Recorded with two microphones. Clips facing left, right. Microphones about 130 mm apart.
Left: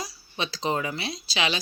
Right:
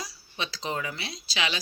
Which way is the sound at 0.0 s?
25° left (ahead or behind).